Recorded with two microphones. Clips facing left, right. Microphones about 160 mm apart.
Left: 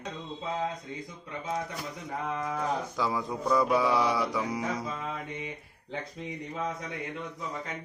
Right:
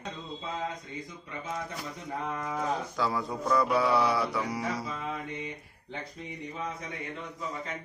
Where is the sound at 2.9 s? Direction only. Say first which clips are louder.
Even; 15° left (ahead or behind).